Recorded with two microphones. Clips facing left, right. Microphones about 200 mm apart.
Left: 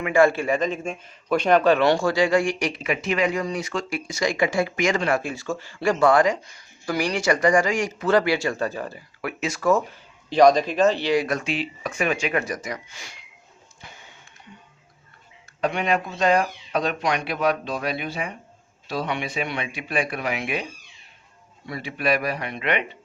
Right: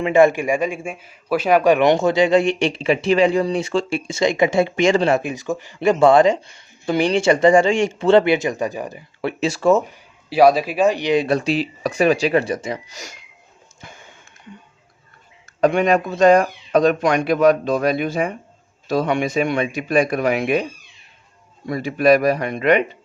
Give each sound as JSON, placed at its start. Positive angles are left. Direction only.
{"t": 0.0, "sound": "a man's voice", "side_deg": -20}
{"t": 9.2, "sound": "a man's voice", "side_deg": -30}
{"t": 9.9, "sound": "speech", "side_deg": -5}
{"t": 13.8, "sound": "a sound", "side_deg": -50}
{"t": 15.6, "sound": "speech", "side_deg": -45}
{"t": 21.7, "sound": "speech", "side_deg": -45}